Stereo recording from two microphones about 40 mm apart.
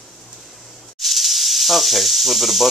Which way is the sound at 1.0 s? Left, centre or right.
Centre.